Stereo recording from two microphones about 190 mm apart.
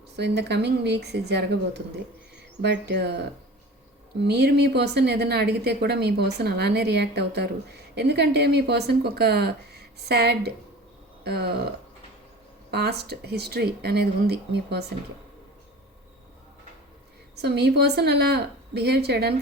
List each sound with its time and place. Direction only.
0.2 s a woman's voice: 60° right (ahead or behind)
12.7 s a woman's voice: 60° right (ahead or behind)
17.3 s a woman's voice: 60° right (ahead or behind)